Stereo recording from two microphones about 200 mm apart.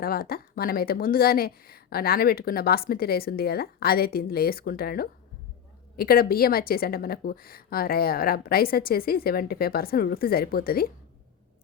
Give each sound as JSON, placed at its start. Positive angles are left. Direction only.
{"t": 0.0, "sound": "a woman's voice", "side_deg": 50}